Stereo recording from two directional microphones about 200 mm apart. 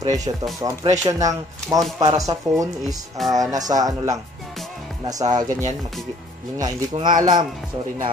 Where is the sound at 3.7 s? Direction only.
20° right (ahead or behind).